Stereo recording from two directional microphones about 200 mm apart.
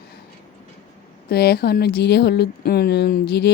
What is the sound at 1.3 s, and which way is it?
Speech, 55° left (ahead or behind).